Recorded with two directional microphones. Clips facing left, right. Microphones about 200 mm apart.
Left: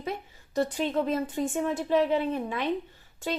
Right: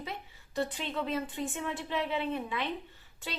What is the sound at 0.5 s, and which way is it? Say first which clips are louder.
Speech: left 7 dB; 45° left (ahead or behind).